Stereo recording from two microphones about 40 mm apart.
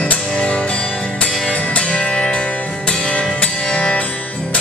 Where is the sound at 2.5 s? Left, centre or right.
Left.